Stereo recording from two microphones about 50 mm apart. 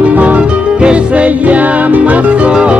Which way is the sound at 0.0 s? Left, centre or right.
Right.